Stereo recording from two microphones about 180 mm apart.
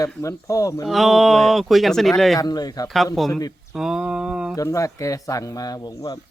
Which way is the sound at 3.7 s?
5° right (ahead or behind).